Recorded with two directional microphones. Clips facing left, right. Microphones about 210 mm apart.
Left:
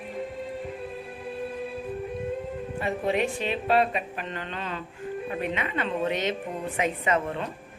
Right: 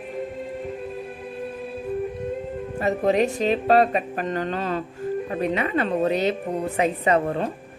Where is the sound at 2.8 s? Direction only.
40° right (ahead or behind).